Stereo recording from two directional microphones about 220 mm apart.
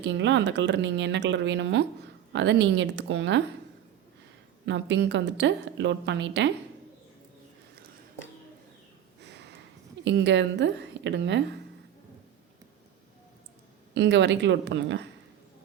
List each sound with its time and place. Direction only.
0.0 s a woman's voice: 55° right (ahead or behind)
4.6 s a woman's voice: 55° right (ahead or behind)
9.2 s a sound: 50° right (ahead or behind)
10.0 s a woman's voice: 50° right (ahead or behind)
13.9 s a woman's voice: 50° right (ahead or behind)